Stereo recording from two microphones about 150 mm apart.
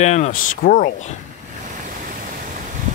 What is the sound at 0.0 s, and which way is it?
Speech, 50° left (ahead or behind).